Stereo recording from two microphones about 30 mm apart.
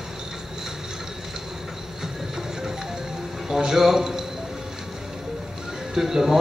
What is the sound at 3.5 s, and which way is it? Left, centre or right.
Speech, centre.